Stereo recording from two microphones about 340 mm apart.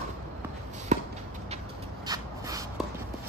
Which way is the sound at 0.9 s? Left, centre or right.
Right.